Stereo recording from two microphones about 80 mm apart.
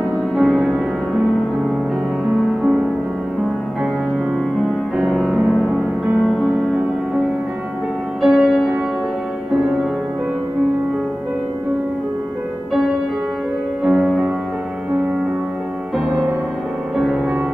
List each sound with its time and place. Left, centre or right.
0.4 s music: centre
4.9 s music: centre
8.3 s music: centre
13.8 s music: centre
16.9 s music: centre